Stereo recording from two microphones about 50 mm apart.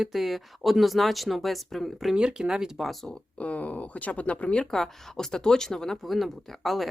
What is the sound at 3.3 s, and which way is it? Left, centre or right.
Speech, left.